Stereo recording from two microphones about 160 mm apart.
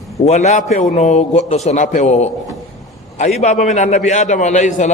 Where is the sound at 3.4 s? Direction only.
45° left (ahead or behind).